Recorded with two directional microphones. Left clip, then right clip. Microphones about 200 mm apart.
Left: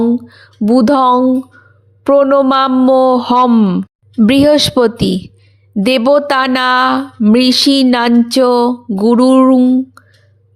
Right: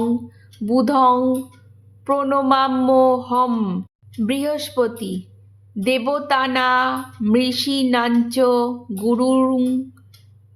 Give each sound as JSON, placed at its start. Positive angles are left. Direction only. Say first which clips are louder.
{"t": 0.3, "sound": "speech", "louder": "left 9 dB", "side_deg": 40}